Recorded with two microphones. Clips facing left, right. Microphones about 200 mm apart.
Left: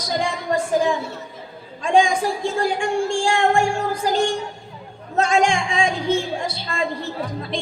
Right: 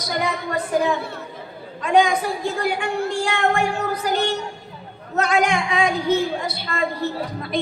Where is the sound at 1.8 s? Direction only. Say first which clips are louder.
Even; 30° left (ahead or behind).